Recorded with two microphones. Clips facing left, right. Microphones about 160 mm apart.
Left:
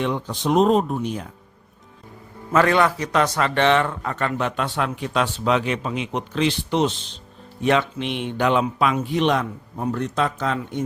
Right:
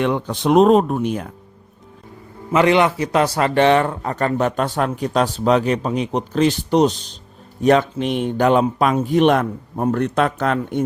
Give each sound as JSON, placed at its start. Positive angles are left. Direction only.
{"t": 0.0, "sound": "speech", "side_deg": -60}
{"t": 2.5, "sound": "a man's voice", "side_deg": -20}